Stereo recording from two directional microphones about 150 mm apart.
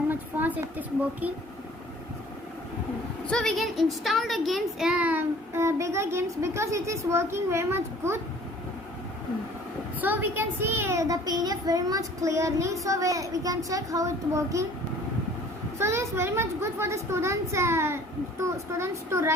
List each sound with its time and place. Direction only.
0.1 s a woman's voice: 10° right (ahead or behind)
3.2 s a woman's voice: 5° left (ahead or behind); by 8.2 s 15° right (ahead or behind)
10.0 s a child's voice: 15° right (ahead or behind)
15.8 s a child's voice: 15° right (ahead or behind)